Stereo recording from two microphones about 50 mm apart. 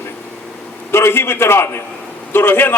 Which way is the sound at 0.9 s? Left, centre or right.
Left.